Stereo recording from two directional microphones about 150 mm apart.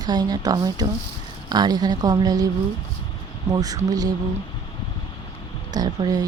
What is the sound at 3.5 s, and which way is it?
Speech, 25° right (ahead or behind).